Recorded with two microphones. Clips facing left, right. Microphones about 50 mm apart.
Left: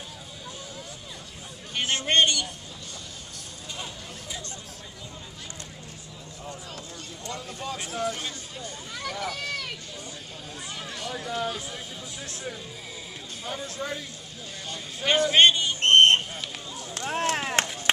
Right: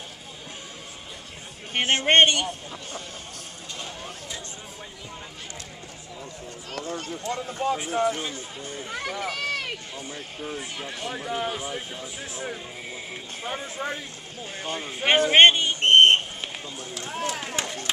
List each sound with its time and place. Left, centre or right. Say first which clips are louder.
1.7 s a man's voice: right 5 dB; right
6.7 s speech: right 8 dB; right
7.2 s a man's voice: right 7 dB; right
7.7 s speech: right 5 dB; centre
9.2 s run: right 3 dB; right
10.4 s a man's voice: right 5 dB; right
11.1 s a man's voice: right 1 dB; right
15.8 s a sound: right 1 dB; centre
16.9 s a sound: left 4 dB; left
17.9 s run: left 6 dB; left